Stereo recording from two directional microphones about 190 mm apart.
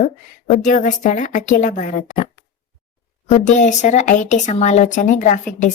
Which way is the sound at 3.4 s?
40° left (ahead or behind).